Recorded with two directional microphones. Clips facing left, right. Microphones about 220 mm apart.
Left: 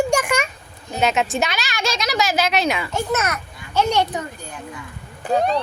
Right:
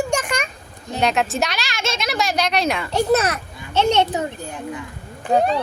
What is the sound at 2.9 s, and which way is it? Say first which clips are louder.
A child's voice: right 5 dB; 35° right (ahead or behind).